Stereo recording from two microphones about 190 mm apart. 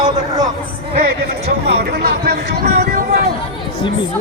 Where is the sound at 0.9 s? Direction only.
55° right (ahead or behind).